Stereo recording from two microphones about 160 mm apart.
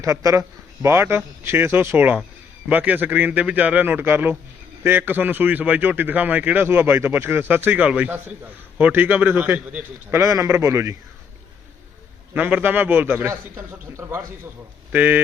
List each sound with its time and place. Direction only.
0.0 s a man's voice: 20° right (ahead or behind)
12.3 s a man's voice: 10° right (ahead or behind)